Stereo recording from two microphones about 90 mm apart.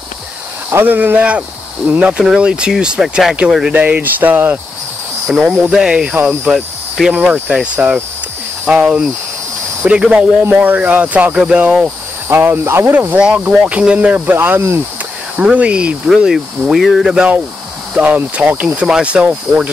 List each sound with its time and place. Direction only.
0.7 s speech: 25° right (ahead or behind)
3.8 s speech: 20° right (ahead or behind)
5.4 s speech: 10° right (ahead or behind)
12.3 s speech: 25° right (ahead or behind)
15.3 s speech: 15° right (ahead or behind)